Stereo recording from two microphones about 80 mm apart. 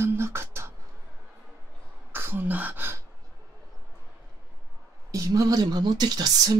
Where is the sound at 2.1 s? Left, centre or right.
Right.